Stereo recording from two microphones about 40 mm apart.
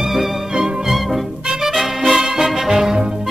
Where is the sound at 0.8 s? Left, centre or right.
Centre.